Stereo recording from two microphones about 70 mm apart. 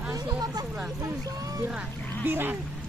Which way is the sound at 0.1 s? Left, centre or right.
Right.